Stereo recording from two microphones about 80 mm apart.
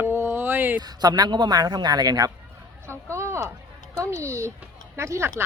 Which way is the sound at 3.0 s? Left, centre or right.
Right.